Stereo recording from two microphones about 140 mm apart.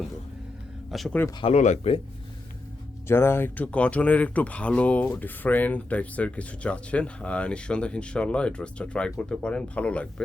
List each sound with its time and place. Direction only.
0.9 s speech: centre (ahead or behind)
1.5 s speech: 55° left (ahead or behind)
3.1 s speech: 15° left (ahead or behind)